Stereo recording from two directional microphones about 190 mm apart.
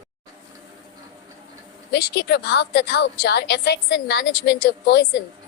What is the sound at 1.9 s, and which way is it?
A woman's voice, 60° left (ahead or behind).